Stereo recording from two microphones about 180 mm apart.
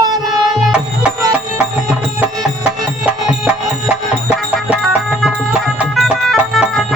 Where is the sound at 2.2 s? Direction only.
5° right (ahead or behind).